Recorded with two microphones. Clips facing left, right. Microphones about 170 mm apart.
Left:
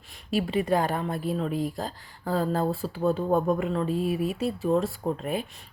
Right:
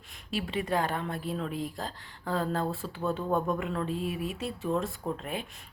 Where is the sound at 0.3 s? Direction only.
40° left (ahead or behind).